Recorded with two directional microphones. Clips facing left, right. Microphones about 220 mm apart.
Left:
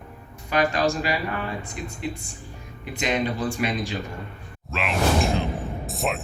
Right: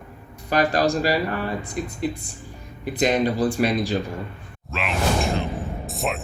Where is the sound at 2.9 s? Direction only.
35° right (ahead or behind).